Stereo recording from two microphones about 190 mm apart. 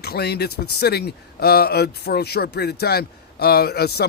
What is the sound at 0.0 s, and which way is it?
Speech, 55° left (ahead or behind).